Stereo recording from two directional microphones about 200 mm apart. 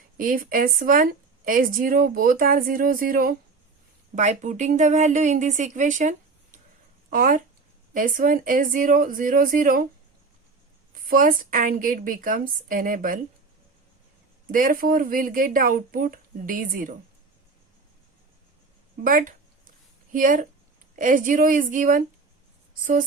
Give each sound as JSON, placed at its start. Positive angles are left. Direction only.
{"t": 0.2, "sound": "a woman's voice", "side_deg": -45}
{"t": 10.9, "sound": "a woman's voice", "side_deg": -45}
{"t": 14.5, "sound": "a woman's voice", "side_deg": -45}
{"t": 19.0, "sound": "a woman's voice", "side_deg": -45}